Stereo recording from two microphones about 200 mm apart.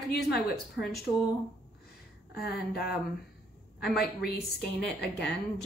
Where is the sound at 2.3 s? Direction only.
50° left (ahead or behind).